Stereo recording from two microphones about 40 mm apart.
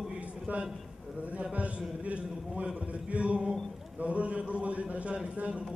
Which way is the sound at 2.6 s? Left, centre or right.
Right.